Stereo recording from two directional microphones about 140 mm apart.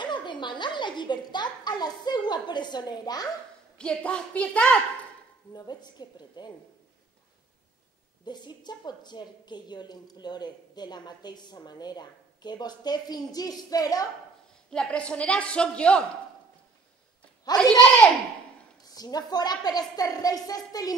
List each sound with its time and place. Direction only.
0.0 s a woman's voice: 35° left (ahead or behind)
3.7 s a woman's voice: 10° left (ahead or behind)
5.5 s a woman's voice: 30° left (ahead or behind)
8.3 s a woman's voice: 30° left (ahead or behind)
14.7 s a woman's voice: 5° left (ahead or behind)
17.5 s a woman's voice: 30° left (ahead or behind)
18.9 s a woman's voice: 30° left (ahead or behind)